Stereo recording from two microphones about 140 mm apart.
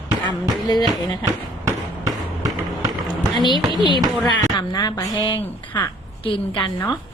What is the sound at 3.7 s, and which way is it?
Speech, 35° left (ahead or behind).